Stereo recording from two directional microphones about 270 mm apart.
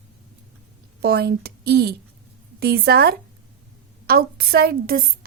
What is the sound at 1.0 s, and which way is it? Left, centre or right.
A woman's voice, right.